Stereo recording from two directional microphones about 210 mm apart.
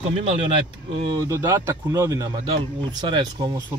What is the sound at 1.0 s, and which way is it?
Speech, 20° right (ahead or behind).